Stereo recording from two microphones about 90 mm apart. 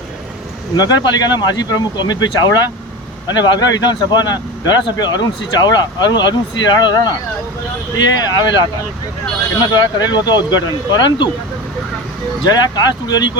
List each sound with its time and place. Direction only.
0.8 s speech: 50° left (ahead or behind)
9.7 s speech: 50° left (ahead or behind)
12.5 s speech: 50° left (ahead or behind)